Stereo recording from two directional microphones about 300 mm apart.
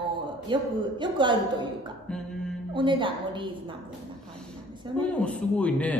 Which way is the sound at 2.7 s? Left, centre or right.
Centre.